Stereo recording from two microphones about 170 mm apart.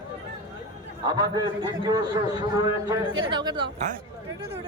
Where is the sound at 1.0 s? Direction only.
25° right (ahead or behind).